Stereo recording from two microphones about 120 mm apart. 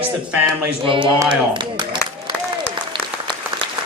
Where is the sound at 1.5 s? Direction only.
40° right (ahead or behind).